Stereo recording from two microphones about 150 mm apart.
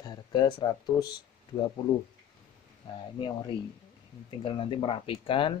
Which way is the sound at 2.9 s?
35° left (ahead or behind).